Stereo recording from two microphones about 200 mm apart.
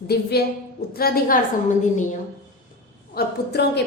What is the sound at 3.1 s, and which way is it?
Speech, 55° left (ahead or behind).